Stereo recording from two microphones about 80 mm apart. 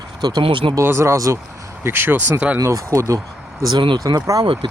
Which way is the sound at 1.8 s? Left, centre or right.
Right.